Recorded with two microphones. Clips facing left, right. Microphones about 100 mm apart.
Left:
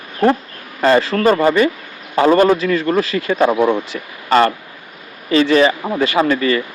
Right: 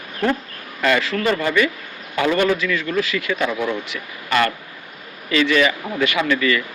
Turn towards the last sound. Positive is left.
turn(degrees=35)  # may be behind; listen again after turning